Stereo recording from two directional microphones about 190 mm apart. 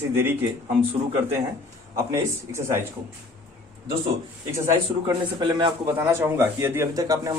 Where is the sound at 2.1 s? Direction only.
15° right (ahead or behind).